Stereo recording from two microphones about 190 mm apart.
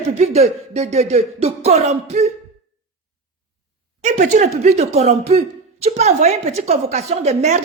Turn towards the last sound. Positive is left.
turn(degrees=-35)  # may be behind; listen again after turning